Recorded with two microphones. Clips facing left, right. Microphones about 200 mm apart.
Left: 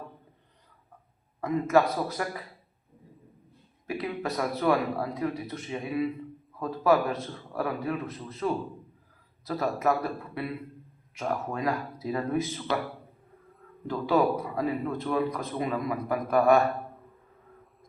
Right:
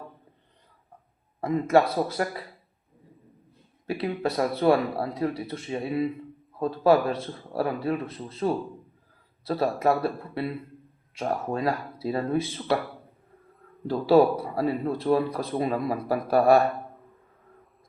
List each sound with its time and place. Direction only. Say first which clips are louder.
1.4 s speech: right 2 dB; 30° right (ahead or behind)
3.8 s a man's voice: right 4 dB; 30° right (ahead or behind)
13.8 s a man's voice: right 6 dB; 35° right (ahead or behind)